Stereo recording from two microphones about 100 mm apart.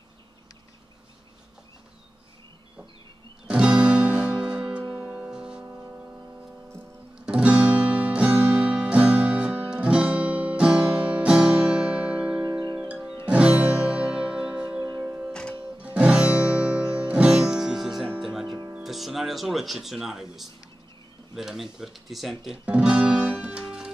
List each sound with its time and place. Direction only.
3.4 s music: 10° right (ahead or behind)
12.4 s music: 40° right (ahead or behind)
12.8 s music: 10° right (ahead or behind)
14.8 s music: 40° right (ahead or behind)
15.0 s music: 15° right (ahead or behind)
15.6 s guitar: 15° right (ahead or behind)
18.2 s music: 5° right (ahead or behind)
18.8 s speech: centre (ahead or behind)